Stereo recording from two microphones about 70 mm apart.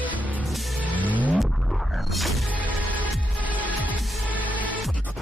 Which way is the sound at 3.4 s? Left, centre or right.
Right.